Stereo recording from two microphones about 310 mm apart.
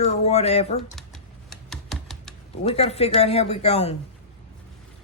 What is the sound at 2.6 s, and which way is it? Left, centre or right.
Speech, centre.